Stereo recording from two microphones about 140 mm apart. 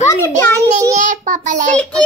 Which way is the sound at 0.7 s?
60° right (ahead or behind).